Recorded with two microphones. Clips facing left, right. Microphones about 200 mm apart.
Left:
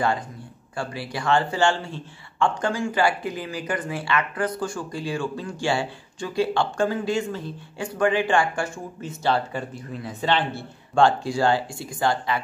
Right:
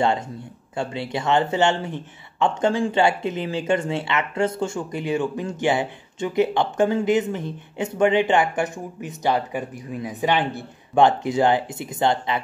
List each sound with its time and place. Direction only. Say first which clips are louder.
0.7 s speech: right 4 dB; 20° right (ahead or behind)